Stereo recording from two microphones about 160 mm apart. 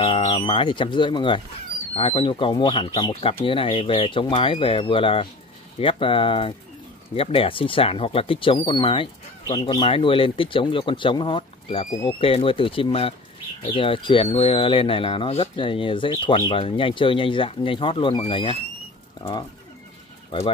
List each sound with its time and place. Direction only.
0.0 s speech: 40° left (ahead or behind)
20.2 s speech: 30° left (ahead or behind)